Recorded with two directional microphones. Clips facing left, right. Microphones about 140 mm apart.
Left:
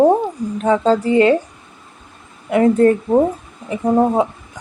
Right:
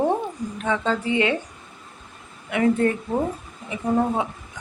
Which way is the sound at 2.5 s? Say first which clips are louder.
Left 8 dB; 40° left (ahead or behind).